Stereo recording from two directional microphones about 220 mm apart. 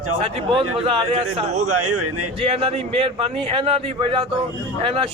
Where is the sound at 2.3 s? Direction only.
25° right (ahead or behind).